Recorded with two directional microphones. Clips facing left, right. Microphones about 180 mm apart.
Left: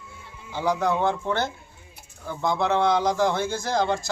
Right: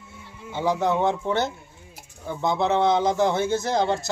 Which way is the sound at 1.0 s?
20° right (ahead or behind).